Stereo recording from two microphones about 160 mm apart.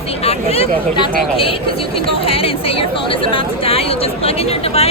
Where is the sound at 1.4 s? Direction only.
35° left (ahead or behind).